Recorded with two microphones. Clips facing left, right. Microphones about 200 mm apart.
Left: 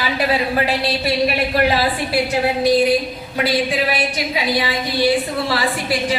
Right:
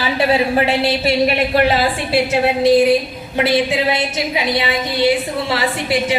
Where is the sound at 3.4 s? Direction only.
25° right (ahead or behind).